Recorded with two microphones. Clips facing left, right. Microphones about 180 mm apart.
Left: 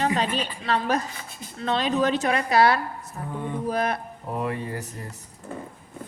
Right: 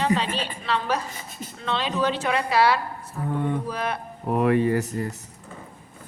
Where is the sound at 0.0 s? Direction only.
45° left (ahead or behind).